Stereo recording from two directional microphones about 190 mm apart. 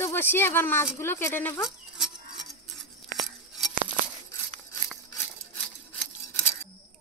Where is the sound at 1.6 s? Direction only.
Centre (ahead or behind).